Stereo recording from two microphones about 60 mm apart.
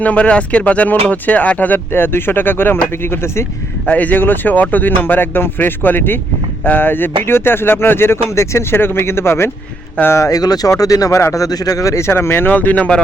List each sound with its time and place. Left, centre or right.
0.0 s speech: left
3.8 s speech: left
10.2 s speech: left
11.3 s speech: left